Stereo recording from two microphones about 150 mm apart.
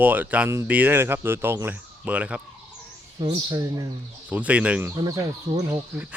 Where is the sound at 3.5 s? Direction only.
20° right (ahead or behind).